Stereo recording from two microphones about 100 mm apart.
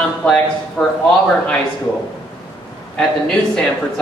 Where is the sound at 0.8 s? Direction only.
20° left (ahead or behind).